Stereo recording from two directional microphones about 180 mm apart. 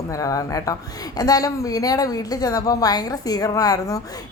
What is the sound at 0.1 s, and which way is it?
A woman's voice, 20° left (ahead or behind).